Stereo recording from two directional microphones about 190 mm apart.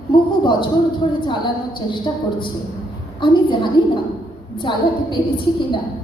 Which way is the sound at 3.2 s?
25° left (ahead or behind).